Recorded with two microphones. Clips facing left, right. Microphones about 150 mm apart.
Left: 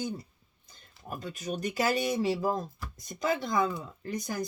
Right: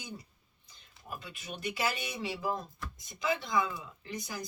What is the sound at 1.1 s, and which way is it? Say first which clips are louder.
Speech: left 8 dB; 45° left (ahead or behind).